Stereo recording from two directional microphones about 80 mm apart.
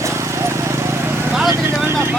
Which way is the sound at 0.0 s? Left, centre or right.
Right.